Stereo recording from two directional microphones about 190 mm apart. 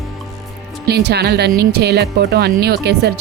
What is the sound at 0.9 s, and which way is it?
A woman's voice, 60° right (ahead or behind).